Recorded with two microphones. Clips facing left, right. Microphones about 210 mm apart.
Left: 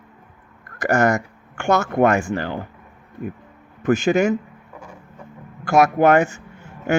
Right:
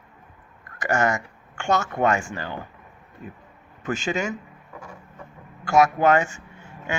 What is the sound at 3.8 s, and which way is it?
Speech, 60° left (ahead or behind).